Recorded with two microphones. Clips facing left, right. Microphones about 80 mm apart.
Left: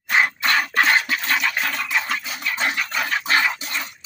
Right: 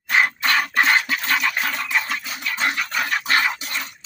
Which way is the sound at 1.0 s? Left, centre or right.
Right.